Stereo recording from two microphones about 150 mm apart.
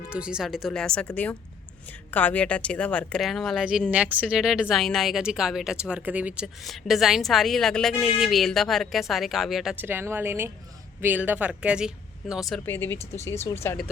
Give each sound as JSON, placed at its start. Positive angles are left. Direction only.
{"t": 0.1, "sound": "speech", "side_deg": -5}
{"t": 9.7, "sound": "speech", "side_deg": -15}
{"t": 12.6, "sound": "speech", "side_deg": 15}